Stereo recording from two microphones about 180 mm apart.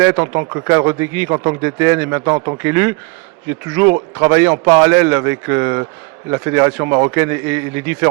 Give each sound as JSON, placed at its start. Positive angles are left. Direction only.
{"t": 0.0, "sound": "speech", "side_deg": -15}